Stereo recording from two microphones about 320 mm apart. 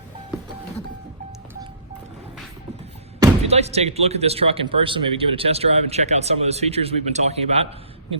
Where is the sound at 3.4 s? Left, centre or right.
Centre.